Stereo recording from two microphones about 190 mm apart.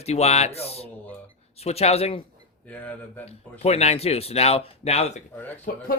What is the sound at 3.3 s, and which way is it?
Speech, 35° left (ahead or behind).